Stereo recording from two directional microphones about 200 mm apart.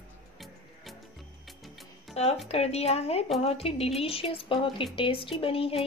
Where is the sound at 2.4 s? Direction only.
30° left (ahead or behind).